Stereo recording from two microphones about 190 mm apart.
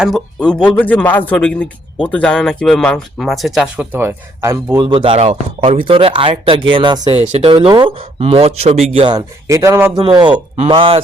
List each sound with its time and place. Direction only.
0.0 s speech: centre (ahead or behind); by 10.0 s 15° right (ahead or behind)
10.0 s speech: 25° right (ahead or behind)